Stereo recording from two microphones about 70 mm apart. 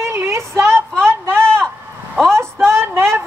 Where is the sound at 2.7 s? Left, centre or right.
Right.